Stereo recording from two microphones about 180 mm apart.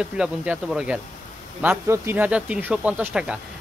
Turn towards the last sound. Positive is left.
turn(degrees=-5)  # may be behind; listen again after turning